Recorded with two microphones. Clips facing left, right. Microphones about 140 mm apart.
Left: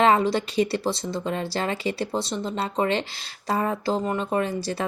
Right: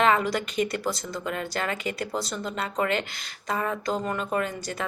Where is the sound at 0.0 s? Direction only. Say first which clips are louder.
Left 3 dB; 30° left (ahead or behind).